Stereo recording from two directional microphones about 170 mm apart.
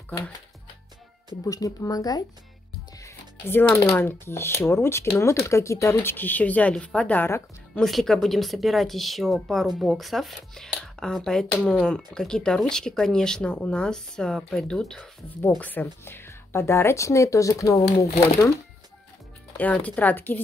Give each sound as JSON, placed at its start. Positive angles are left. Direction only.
{"t": 1.4, "sound": "speech", "side_deg": 20}
{"t": 3.0, "sound": "music", "side_deg": 15}
{"t": 3.9, "sound": "speech", "side_deg": 15}
{"t": 7.8, "sound": "a woman's voice", "side_deg": 0}
{"t": 19.5, "sound": "speech", "side_deg": 10}